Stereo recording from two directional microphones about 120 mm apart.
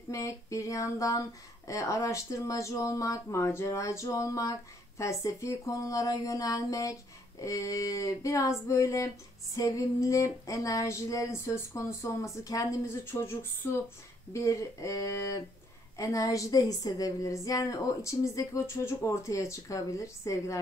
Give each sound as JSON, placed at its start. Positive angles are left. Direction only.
{"t": 0.1, "sound": "speech", "side_deg": 25}